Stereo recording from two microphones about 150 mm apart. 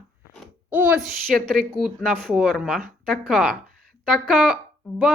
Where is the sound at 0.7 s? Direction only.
10° right (ahead or behind).